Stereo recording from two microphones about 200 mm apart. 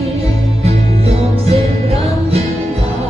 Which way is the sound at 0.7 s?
30° right (ahead or behind).